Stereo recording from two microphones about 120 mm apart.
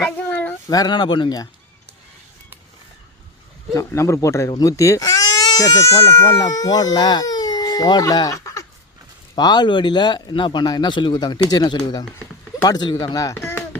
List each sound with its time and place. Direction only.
0.0 s a sound: 15° left (ahead or behind)
0.7 s speech: 35° left (ahead or behind)
3.7 s speech: 25° left (ahead or behind)